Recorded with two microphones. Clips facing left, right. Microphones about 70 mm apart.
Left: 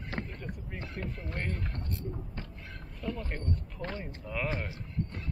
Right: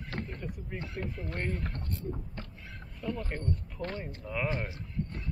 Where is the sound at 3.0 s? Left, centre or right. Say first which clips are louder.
Right 1 dB; centre.